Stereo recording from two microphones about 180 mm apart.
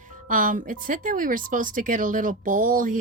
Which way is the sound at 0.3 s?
50° right (ahead or behind).